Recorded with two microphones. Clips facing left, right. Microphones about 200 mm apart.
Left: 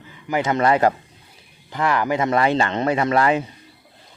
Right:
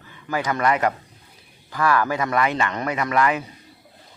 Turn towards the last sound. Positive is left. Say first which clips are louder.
# left 3 dB
turn(degrees=30)  # may be behind; listen again after turning